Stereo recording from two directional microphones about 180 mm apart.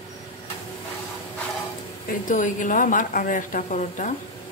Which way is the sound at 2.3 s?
45° left (ahead or behind).